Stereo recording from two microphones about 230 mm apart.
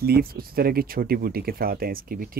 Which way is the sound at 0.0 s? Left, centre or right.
Right.